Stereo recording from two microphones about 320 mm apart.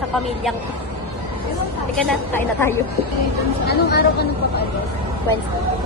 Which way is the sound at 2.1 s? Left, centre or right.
Centre.